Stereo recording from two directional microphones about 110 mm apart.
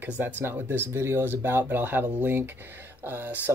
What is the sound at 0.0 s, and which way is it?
Speech, 20° right (ahead or behind).